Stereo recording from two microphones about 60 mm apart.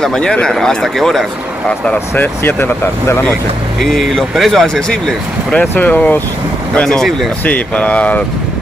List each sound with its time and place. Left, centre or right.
0.0 s speech: centre
2.1 s speech: left
3.8 s speech: centre
5.6 s speech: left
6.7 s speech: centre
7.4 s speech: left